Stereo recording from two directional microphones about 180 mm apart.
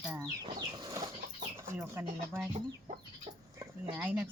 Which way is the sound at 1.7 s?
10° right (ahead or behind).